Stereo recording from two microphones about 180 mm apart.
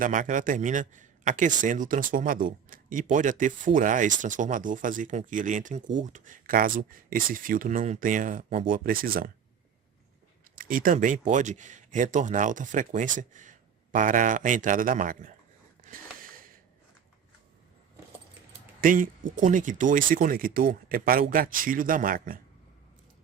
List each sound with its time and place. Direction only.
0.0 s a man's voice: 45° right (ahead or behind)
8.7 s a man's voice: 55° right (ahead or behind)
10.5 s a man's voice: 50° right (ahead or behind)
15.8 s snort: 50° right (ahead or behind)
18.8 s a man's voice: 50° right (ahead or behind)